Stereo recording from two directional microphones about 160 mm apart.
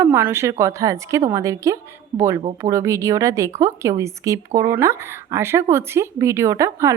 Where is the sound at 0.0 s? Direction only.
15° right (ahead or behind).